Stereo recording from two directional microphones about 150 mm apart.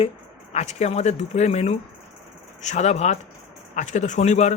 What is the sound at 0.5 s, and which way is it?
A man's voice, 50° left (ahead or behind).